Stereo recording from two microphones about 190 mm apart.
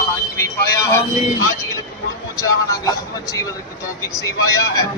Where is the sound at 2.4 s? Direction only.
15° left (ahead or behind).